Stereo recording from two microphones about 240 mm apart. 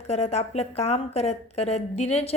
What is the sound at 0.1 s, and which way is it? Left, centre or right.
Speech, left.